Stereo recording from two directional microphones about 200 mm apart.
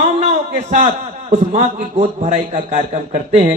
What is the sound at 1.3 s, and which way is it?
A man's voice, 35° right (ahead or behind).